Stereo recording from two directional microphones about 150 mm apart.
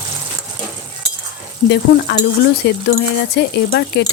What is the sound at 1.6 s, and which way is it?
Speech, 90° left.